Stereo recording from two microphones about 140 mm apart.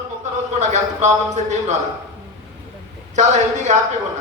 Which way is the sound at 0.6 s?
55° right (ahead or behind).